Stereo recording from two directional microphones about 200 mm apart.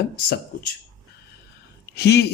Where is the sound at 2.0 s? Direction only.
55° left (ahead or behind).